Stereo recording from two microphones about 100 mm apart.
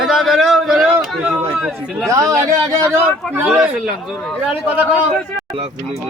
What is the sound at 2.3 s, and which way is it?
Speech, 30° right (ahead or behind).